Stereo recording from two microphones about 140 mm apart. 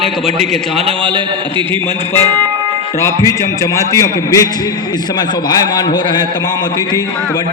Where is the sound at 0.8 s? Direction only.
40° right (ahead or behind).